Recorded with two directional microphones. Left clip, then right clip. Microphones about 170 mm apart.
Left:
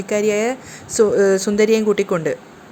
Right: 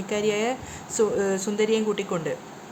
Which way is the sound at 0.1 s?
25° left (ahead or behind).